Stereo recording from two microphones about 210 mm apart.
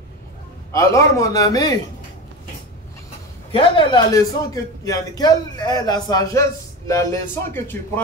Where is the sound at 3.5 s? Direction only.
25° left (ahead or behind).